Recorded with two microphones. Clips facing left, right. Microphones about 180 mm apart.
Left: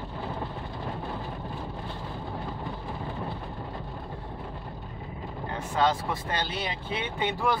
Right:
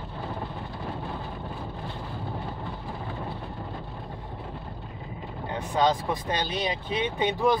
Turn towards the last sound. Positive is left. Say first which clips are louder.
# right 4 dB
turn(degrees=-15)  # may be behind; listen again after turning